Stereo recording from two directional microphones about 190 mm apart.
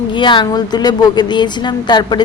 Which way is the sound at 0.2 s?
25° left (ahead or behind).